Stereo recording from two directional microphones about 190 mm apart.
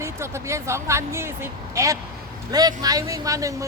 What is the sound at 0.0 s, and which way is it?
A woman's voice, 15° right (ahead or behind).